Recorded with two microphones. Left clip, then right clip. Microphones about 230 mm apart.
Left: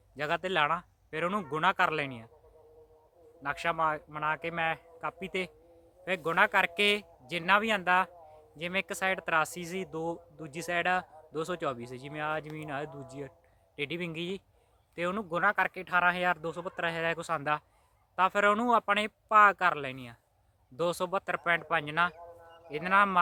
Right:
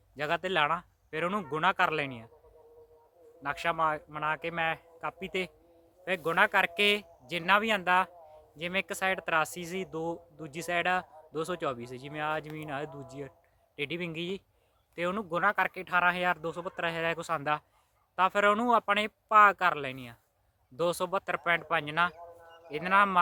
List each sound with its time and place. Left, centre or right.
0.2 s speech: centre
3.4 s speech: centre
22.1 s a sound: right
22.7 s speech: centre